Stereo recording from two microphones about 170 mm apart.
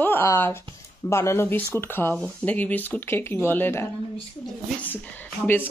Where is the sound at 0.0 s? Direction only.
15° left (ahead or behind).